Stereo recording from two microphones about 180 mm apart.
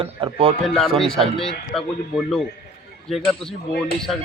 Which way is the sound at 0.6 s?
5° left (ahead or behind).